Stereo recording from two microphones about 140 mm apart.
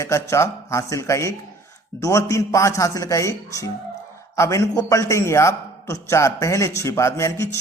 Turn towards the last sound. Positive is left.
turn(degrees=20)  # may be behind; listen again after turning